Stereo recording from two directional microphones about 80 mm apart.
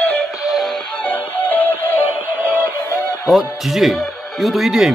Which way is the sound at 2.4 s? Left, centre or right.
Right.